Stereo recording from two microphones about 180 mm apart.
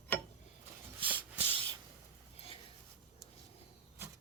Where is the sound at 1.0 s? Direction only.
30° right (ahead or behind).